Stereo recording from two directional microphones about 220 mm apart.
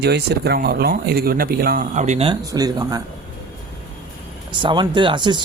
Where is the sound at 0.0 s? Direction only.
50° right (ahead or behind); by 3.0 s 15° right (ahead or behind).